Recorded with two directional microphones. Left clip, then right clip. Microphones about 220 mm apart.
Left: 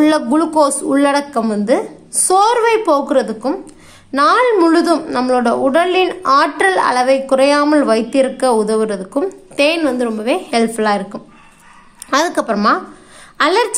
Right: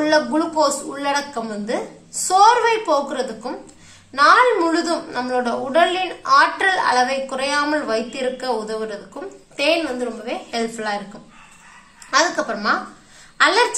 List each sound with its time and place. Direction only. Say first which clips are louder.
0.0 s a woman's voice: left 4 dB; 50° left (ahead or behind)
12.1 s a woman's voice: left 3 dB; 50° left (ahead or behind)